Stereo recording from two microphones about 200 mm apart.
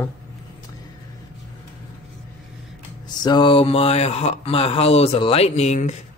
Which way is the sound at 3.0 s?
20° left (ahead or behind).